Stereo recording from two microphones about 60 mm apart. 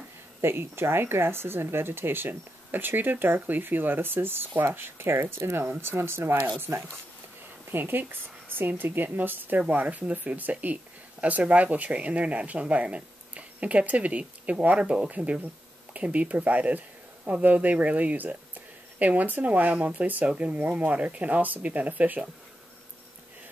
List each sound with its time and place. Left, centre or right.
0.4 s speech: right